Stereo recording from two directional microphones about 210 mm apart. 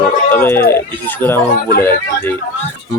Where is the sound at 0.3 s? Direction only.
10° left (ahead or behind).